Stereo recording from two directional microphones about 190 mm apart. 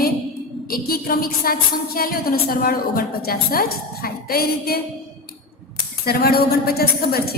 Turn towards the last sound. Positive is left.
turn(degrees=55)  # may be behind; listen again after turning